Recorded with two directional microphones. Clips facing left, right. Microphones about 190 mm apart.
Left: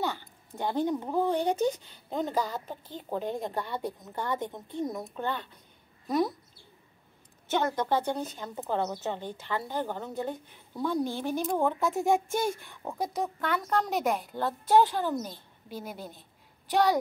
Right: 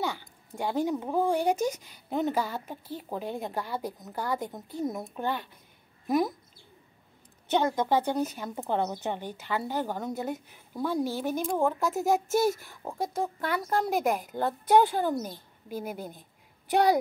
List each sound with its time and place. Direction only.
0.0 s a sound: 10° right (ahead or behind)
1.1 s a woman's voice: 10° right (ahead or behind)
7.4 s a woman's voice: 15° right (ahead or behind)
15.8 s a woman's voice: 55° right (ahead or behind)